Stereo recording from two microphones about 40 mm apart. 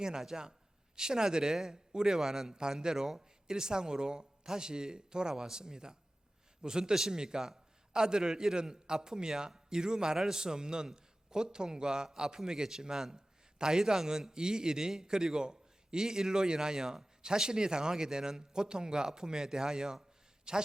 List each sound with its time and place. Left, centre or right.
0.2 s a man's voice: centre